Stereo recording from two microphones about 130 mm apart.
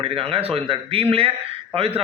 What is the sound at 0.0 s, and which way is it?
A man's voice, 45° right (ahead or behind).